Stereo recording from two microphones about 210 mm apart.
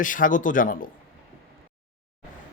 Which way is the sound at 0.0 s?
40° left (ahead or behind).